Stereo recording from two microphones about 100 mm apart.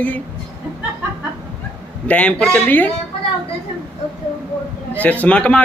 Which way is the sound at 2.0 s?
15° left (ahead or behind).